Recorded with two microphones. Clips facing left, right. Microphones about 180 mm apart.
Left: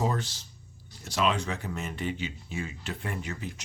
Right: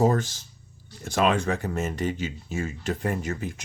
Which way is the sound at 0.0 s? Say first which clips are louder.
Right 8 dB; 45° right (ahead or behind).